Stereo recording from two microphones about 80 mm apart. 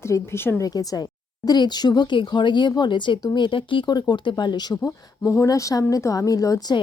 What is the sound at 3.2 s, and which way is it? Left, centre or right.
Speech, left.